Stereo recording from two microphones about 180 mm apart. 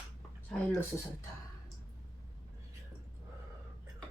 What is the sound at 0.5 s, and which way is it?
Speech, 5° left (ahead or behind).